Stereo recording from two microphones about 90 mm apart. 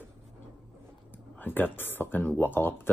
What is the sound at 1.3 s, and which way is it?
Speech, 20° left (ahead or behind).